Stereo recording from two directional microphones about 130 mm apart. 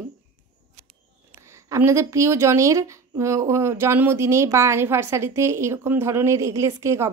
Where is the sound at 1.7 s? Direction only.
20° right (ahead or behind).